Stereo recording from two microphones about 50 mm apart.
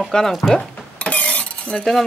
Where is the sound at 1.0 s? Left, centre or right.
Left.